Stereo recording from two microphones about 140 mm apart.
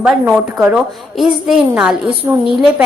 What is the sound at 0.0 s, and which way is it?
A woman's voice, 5° right (ahead or behind).